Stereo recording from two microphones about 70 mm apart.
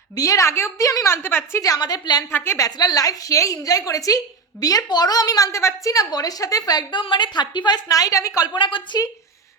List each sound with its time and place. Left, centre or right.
0.2 s a woman's voice: left
1.5 s a woman's voice: left
1.8 s a woman's voice: left
2.3 s a woman's voice: left
2.6 s a woman's voice: left